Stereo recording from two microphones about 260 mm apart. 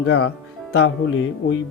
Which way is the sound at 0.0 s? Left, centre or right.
Left.